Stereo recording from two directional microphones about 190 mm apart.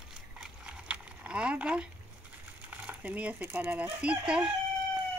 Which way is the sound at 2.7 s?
10° right (ahead or behind).